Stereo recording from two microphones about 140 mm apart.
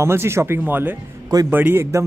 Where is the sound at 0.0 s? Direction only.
20° right (ahead or behind).